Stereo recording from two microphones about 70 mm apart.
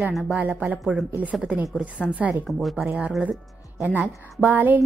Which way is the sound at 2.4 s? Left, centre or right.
Centre.